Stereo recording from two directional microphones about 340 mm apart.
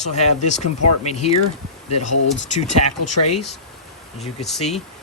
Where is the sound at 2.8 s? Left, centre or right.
Left.